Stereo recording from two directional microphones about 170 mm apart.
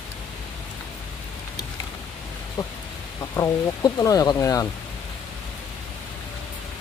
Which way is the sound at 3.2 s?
20° left (ahead or behind).